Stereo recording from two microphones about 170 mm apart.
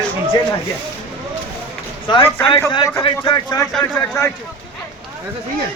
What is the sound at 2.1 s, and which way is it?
Speech, 30° left (ahead or behind).